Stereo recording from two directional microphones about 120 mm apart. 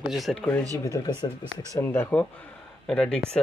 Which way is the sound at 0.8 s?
30° left (ahead or behind).